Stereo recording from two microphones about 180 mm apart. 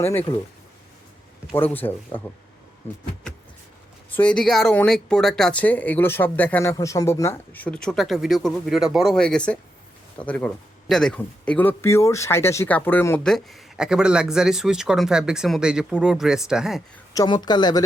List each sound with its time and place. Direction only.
0.0 s speech: 10° left (ahead or behind)
1.5 s speech: 10° left (ahead or behind)
4.1 s speech: 5° left (ahead or behind)
17.2 s speech: 25° left (ahead or behind)